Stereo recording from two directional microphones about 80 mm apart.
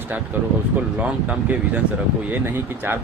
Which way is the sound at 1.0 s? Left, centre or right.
Centre.